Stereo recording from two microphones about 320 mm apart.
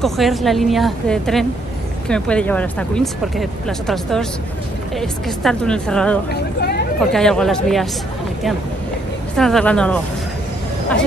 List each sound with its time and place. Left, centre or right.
0.0 s speech: centre
6.6 s a sound: left
7.0 s speech: centre
9.4 s speech: centre